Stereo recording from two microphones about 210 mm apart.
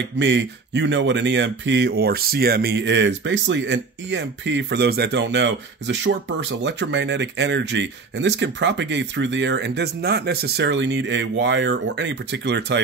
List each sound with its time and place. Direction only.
0.2 s speech: 55° right (ahead or behind)